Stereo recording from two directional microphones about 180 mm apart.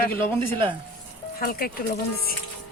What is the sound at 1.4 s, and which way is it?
Speech, 55° left (ahead or behind).